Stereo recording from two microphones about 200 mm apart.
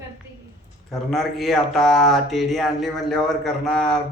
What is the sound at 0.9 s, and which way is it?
Speech, centre (ahead or behind).